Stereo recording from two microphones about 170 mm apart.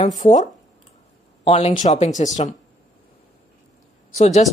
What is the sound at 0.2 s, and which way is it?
Speech, 45° left (ahead or behind).